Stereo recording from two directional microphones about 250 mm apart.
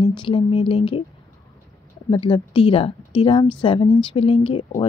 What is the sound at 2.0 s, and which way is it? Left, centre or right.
Speech, centre.